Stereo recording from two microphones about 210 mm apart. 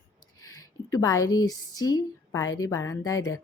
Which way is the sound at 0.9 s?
15° left (ahead or behind).